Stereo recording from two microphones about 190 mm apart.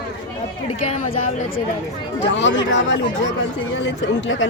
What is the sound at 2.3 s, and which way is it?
A woman's voice, 75° left (ahead or behind).